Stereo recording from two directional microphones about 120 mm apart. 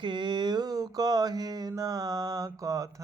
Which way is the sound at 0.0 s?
40° right (ahead or behind).